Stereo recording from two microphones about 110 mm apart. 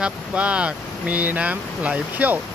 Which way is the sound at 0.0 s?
10° right (ahead or behind).